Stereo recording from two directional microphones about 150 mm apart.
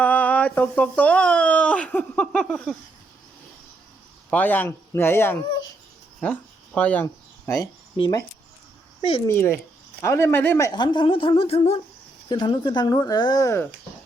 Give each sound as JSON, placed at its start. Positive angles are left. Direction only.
{"t": 0.0, "sound": "speech", "side_deg": 10}
{"t": 4.3, "sound": "speech", "side_deg": 10}
{"t": 6.1, "sound": "a sound", "side_deg": 10}
{"t": 8.0, "sound": "a woman's voice", "side_deg": 35}
{"t": 9.2, "sound": "speech", "side_deg": 15}
{"t": 10.7, "sound": "a woman's voice", "side_deg": 30}
{"t": 12.3, "sound": "speech", "side_deg": 30}